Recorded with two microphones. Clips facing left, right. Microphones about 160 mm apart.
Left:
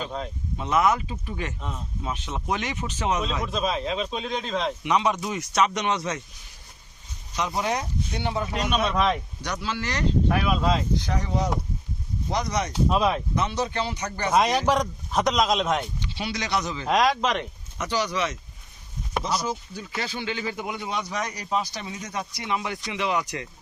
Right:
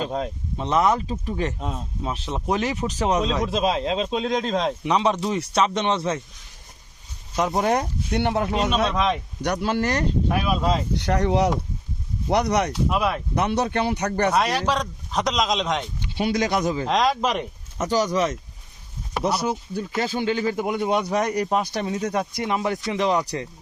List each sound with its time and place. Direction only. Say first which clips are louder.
0.0 s speech: right 5 dB; 40° right (ahead or behind)
7.3 s speech: right 5 dB; 50° right (ahead or behind)
8.7 s speech: right 2 dB; centre (ahead or behind)
9.4 s speech: right 7 dB; 55° right (ahead or behind)
10.3 s speech: right 1 dB; 10° right (ahead or behind)
10.9 s speech: right 6 dB; 65° right (ahead or behind)
13.0 s speech: left 1 dB; 15° left (ahead or behind)
13.3 s speech: right 4 dB; 60° right (ahead or behind)
14.3 s speech: left 1 dB; 15° left (ahead or behind)
16.0 s speech: right 8 dB; 50° right (ahead or behind)
16.9 s speech: left 2 dB; centre (ahead or behind)
17.7 s speech: right 5 dB; 45° right (ahead or behind)
19.2 s speech: right 6 dB; 65° right (ahead or behind)
19.8 s speech: right 10 dB; 45° right (ahead or behind)